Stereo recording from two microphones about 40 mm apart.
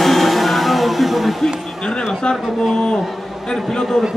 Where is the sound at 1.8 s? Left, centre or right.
Left.